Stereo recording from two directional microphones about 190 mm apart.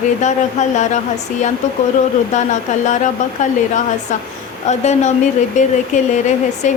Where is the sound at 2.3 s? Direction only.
40° left (ahead or behind).